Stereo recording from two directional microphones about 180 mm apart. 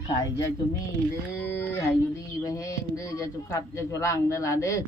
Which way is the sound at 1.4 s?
10° left (ahead or behind).